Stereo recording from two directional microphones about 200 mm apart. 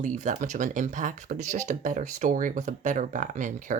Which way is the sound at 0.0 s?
40° right (ahead or behind).